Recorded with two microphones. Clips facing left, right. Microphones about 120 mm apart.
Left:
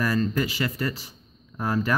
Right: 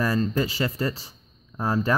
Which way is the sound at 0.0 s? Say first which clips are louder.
Right 1 dB; 30° right (ahead or behind).